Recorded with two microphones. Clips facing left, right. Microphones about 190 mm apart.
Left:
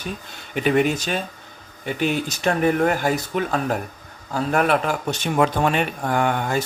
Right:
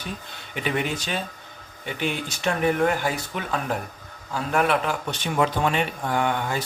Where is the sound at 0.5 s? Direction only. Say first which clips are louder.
Left 7 dB; 45° left (ahead or behind).